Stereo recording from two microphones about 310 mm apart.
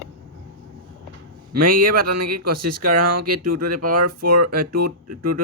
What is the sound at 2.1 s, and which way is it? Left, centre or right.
Speech, right.